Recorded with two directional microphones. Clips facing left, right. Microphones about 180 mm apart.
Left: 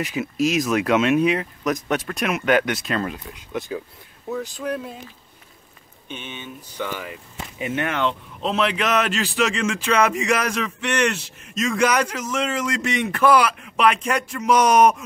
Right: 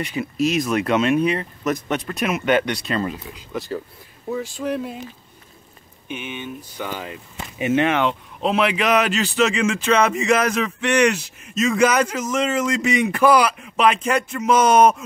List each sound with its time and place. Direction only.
0.0 s speech: centre (ahead or behind)
6.0 s speech: 10° right (ahead or behind)
8.5 s speech: 10° right (ahead or behind)